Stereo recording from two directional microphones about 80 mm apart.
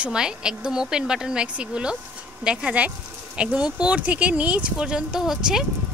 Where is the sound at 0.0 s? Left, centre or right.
Centre.